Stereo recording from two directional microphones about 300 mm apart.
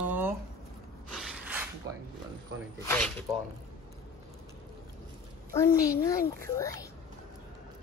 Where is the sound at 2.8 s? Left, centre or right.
Centre.